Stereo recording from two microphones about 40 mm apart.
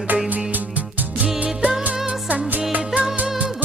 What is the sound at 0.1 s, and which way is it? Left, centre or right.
Music, right.